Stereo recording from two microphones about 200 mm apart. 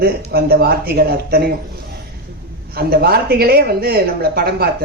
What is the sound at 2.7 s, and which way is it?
Speech, 50° right (ahead or behind).